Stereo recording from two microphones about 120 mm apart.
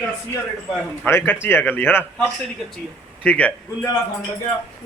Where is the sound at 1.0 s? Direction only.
15° left (ahead or behind).